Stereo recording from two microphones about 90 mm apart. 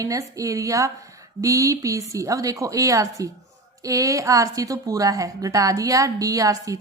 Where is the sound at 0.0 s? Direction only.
40° right (ahead or behind).